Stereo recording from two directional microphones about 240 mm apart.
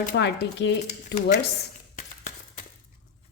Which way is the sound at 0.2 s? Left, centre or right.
Left.